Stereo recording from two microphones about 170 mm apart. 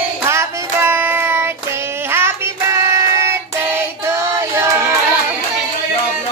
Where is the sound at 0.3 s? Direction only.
15° right (ahead or behind).